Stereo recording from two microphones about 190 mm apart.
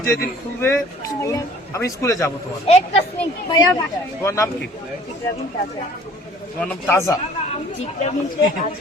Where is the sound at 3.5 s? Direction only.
20° left (ahead or behind).